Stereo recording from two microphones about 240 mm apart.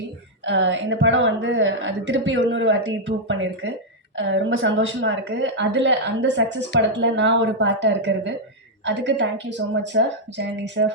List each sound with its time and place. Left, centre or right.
0.4 s a woman's voice: right